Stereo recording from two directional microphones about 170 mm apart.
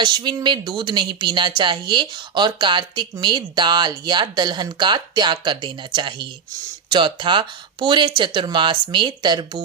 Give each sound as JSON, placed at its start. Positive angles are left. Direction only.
{"t": 0.0, "sound": "a woman's voice", "side_deg": -25}